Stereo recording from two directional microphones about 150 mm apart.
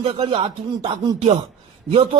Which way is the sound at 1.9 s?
40° right (ahead or behind).